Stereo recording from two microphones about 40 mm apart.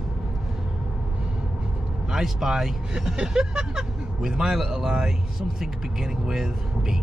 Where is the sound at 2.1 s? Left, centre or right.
Centre.